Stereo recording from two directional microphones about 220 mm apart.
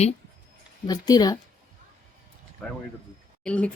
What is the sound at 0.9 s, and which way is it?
Speech, 15° left (ahead or behind).